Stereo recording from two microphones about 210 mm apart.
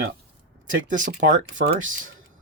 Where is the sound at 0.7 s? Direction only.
40° right (ahead or behind).